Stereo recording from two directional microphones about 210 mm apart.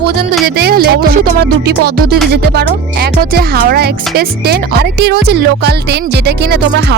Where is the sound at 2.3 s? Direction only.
50° right (ahead or behind).